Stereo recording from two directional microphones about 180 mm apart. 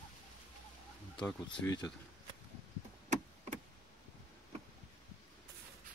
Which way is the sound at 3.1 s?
40° right (ahead or behind).